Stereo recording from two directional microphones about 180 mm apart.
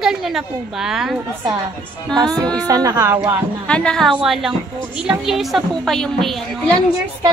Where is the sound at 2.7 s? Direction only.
20° right (ahead or behind).